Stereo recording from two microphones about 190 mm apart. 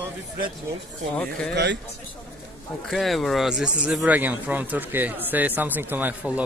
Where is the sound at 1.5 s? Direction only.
65° right (ahead or behind).